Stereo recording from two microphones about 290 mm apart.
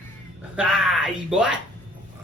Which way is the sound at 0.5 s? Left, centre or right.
Centre.